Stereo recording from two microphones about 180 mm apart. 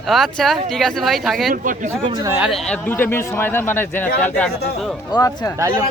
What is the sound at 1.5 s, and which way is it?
Speech, 50° right (ahead or behind).